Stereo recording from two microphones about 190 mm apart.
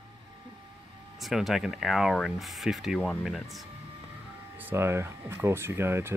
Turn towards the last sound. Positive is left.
turn(degrees=-10)  # may be behind; listen again after turning